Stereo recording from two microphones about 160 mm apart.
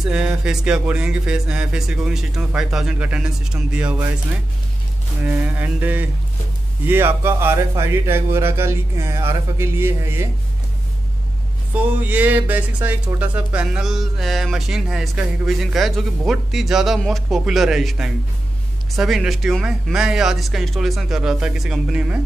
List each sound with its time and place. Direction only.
0.0 s speech: 5° right (ahead or behind)
5.2 s speech: 10° right (ahead or behind)
11.7 s speech: 10° right (ahead or behind)